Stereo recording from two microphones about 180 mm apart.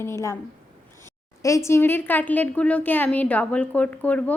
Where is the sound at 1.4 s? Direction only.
15° left (ahead or behind).